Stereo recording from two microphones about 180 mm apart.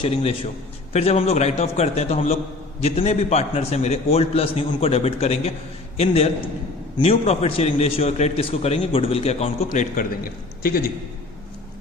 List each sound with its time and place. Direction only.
0.0 s a man's voice: 30° left (ahead or behind); by 10.9 s 55° left (ahead or behind)